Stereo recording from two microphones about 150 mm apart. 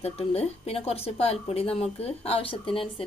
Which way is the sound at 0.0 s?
40° left (ahead or behind).